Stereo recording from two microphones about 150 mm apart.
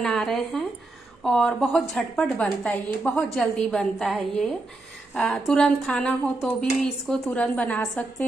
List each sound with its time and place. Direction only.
0.0 s a woman's voice: 5° left (ahead or behind)